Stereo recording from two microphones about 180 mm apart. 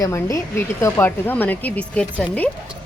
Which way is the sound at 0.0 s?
15° left (ahead or behind).